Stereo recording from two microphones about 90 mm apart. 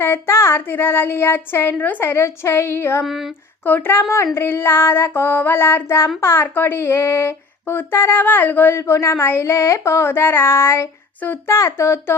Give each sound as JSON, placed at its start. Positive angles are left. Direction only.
{"t": 0.0, "sound": "speech", "side_deg": 25}
{"t": 3.0, "sound": "speech", "side_deg": 0}
{"t": 3.6, "sound": "speech", "side_deg": 20}